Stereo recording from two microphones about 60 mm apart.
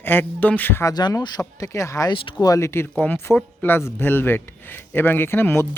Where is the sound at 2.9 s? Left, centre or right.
Left.